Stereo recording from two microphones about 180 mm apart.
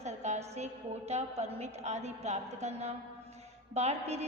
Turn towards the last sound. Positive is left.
turn(degrees=-35)  # may be behind; listen again after turning